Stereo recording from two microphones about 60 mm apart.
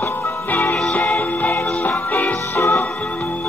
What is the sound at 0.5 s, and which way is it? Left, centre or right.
Music, left.